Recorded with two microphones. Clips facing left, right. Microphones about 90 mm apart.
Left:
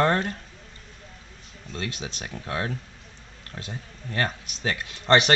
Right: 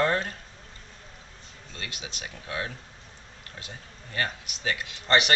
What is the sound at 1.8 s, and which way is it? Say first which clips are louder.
Speech: left 6 dB; 35° left (ahead or behind).